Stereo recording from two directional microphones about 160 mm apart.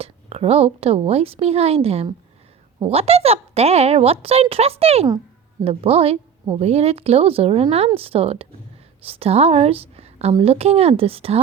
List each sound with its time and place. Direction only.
0.0 s a woman's voice: 40° right (ahead or behind)